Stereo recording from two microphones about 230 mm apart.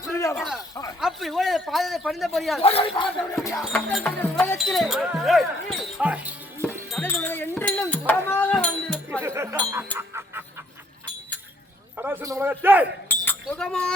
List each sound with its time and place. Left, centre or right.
0.1 s a sound: centre
0.3 s a man's voice: centre
2.6 s speech: left
3.4 s speech: centre
4.5 s wind chime: centre
9.2 s music: centre
11.9 s a man's voice: centre
13.2 s chink: centre